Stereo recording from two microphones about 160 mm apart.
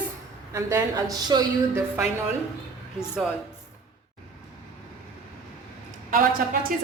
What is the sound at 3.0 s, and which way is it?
Speech, 5° right (ahead or behind).